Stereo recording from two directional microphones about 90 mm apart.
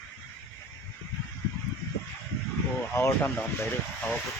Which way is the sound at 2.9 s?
25° left (ahead or behind).